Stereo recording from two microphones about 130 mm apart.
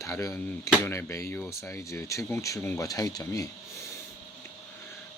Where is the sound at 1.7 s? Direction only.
20° left (ahead or behind).